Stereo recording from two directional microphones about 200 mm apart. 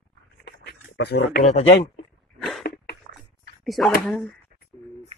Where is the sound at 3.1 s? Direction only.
45° right (ahead or behind).